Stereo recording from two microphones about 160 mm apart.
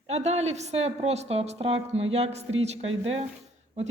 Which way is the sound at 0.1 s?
45° right (ahead or behind).